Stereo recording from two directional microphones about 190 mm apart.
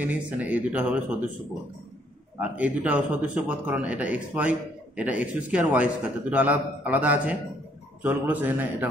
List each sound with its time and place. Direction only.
0.0 s speech: 10° right (ahead or behind)
2.4 s speech: 10° right (ahead or behind)